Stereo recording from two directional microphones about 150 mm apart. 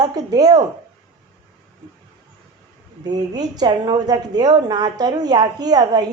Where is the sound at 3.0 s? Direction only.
25° right (ahead or behind).